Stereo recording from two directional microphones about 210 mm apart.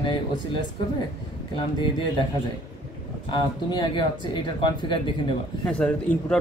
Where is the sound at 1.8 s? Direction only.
20° left (ahead or behind).